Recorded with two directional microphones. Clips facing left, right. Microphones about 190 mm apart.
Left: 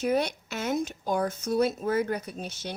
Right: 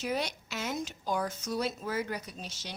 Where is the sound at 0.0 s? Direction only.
55° left (ahead or behind).